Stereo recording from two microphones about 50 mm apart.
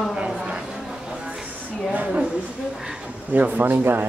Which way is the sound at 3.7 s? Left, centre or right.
Right.